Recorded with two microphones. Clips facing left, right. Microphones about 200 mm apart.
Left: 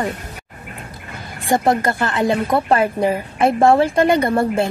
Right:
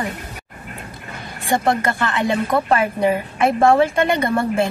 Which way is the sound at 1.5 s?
35° left (ahead or behind).